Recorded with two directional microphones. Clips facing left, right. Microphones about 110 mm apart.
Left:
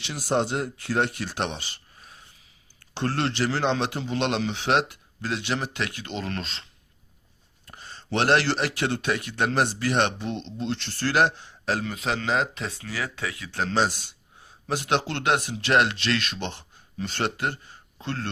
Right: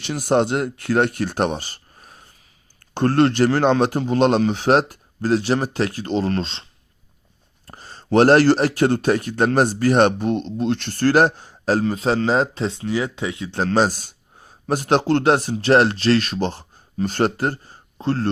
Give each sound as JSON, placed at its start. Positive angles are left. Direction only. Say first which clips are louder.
{"t": 0.0, "sound": "speech", "louder": "right 7 dB", "side_deg": -55}
{"t": 7.7, "sound": "speech", "louder": "right 10 dB", "side_deg": -40}
{"t": 13.7, "sound": "speech", "louder": "right 6 dB", "side_deg": -45}